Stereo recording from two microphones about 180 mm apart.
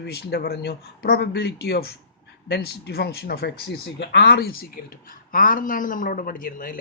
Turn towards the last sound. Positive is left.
turn(degrees=50)  # may be behind; listen again after turning